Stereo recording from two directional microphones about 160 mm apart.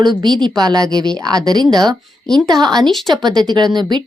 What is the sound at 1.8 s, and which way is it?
A woman's voice, centre (ahead or behind).